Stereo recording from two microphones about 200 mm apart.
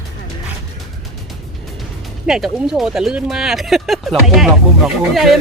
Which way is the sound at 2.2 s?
5° right (ahead or behind).